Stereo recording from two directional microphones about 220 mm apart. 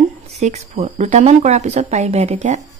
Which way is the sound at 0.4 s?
30° right (ahead or behind).